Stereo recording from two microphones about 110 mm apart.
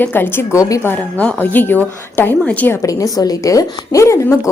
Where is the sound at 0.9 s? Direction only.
15° left (ahead or behind).